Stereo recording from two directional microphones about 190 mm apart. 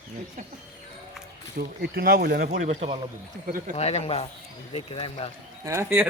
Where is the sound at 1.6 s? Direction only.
50° right (ahead or behind).